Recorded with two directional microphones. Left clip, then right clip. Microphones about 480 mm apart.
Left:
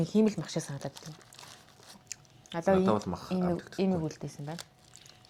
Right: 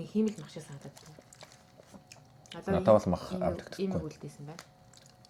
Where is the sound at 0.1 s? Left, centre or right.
Left.